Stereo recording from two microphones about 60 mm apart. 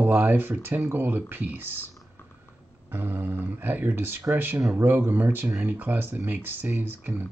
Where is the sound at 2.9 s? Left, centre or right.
Right.